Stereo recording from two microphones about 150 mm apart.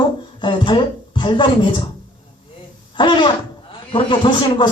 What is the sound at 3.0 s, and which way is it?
A man's voice, 30° left (ahead or behind).